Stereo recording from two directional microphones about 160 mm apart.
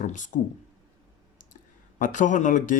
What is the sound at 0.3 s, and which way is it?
Speech, 50° left (ahead or behind).